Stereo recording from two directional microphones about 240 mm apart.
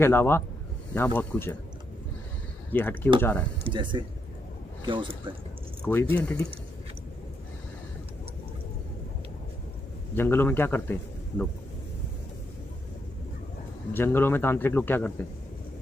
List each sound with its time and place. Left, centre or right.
0.0 s a man's voice: centre
2.7 s a man's voice: centre
3.6 s speech: centre
5.8 s speech: centre
10.2 s a man's voice: centre
13.9 s a man's voice: centre